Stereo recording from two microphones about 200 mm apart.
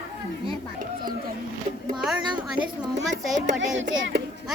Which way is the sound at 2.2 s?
25° right (ahead or behind).